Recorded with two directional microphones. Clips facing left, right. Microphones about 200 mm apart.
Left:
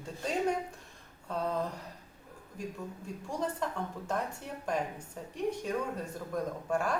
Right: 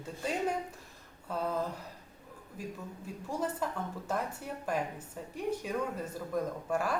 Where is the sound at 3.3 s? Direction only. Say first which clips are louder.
Even; 5° right (ahead or behind).